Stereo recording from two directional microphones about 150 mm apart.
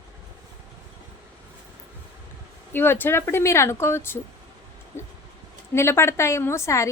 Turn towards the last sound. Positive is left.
turn(degrees=20)  # may be behind; listen again after turning